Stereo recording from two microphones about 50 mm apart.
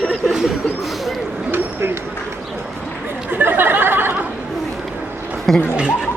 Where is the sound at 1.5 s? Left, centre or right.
Right.